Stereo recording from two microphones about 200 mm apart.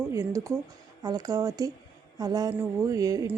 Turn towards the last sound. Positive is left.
turn(degrees=-15)  # may be behind; listen again after turning